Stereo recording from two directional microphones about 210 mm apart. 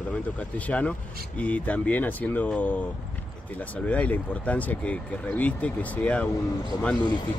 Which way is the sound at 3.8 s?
5° left (ahead or behind).